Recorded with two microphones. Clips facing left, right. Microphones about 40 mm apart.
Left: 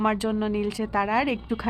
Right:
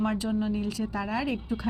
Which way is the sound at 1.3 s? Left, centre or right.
Left.